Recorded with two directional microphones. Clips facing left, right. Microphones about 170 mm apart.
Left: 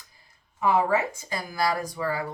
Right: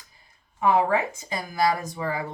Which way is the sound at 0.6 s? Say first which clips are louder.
Right 1 dB; 20° right (ahead or behind).